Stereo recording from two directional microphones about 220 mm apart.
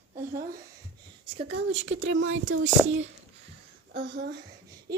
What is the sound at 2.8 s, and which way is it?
Speech, 5° right (ahead or behind).